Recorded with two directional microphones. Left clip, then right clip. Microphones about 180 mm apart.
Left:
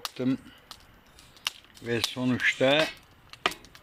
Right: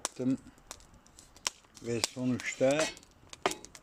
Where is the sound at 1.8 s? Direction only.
10° right (ahead or behind).